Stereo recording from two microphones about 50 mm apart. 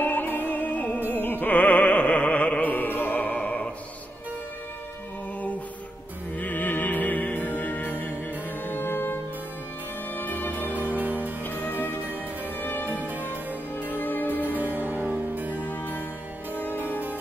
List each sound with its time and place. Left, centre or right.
0.0 s music: left
6.3 s music: left
10.7 s music: right
11.4 s music: left
12.9 s music: right
13.9 s music: left
14.3 s music: right
15.6 s music: left